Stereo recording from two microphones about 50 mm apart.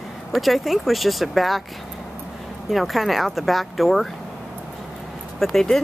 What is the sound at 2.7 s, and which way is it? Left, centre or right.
Speech, centre.